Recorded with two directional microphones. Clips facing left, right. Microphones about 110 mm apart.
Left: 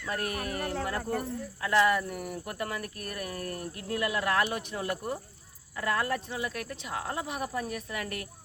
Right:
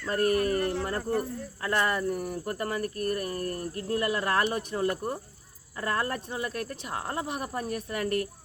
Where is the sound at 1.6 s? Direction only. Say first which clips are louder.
Left 2 dB; 35° right (ahead or behind).